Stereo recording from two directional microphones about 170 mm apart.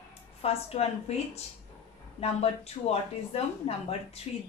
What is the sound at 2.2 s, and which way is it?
Speech, 40° left (ahead or behind).